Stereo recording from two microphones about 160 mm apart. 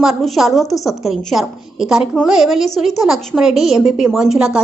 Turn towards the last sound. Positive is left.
turn(degrees=-5)  # may be behind; listen again after turning